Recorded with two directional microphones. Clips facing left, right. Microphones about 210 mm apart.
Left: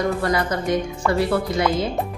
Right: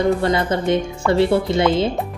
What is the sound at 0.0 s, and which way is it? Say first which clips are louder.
A woman's voice: right 4 dB; 25° right (ahead or behind).